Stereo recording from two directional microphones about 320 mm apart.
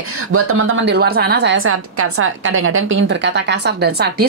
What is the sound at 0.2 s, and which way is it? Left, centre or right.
A woman's voice, right.